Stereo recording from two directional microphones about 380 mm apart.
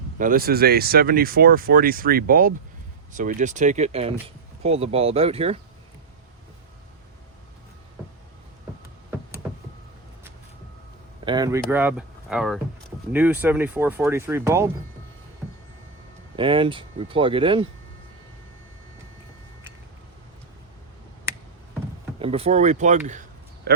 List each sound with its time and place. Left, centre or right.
0.2 s speech: right
11.3 s speech: centre
16.3 s speech: centre
22.2 s speech: centre